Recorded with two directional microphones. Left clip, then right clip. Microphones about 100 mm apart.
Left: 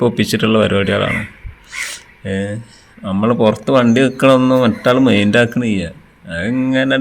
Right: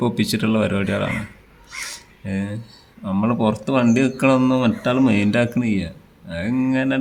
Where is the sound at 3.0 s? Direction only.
20° left (ahead or behind).